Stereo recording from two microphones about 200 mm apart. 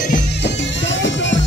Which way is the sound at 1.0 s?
65° left (ahead or behind).